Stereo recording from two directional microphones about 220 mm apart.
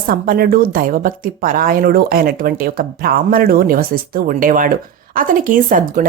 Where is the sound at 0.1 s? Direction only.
40° right (ahead or behind).